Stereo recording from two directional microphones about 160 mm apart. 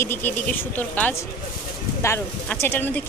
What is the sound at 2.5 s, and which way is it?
Speech, 15° left (ahead or behind).